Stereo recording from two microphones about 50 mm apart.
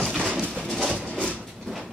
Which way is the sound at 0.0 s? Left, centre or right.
Centre.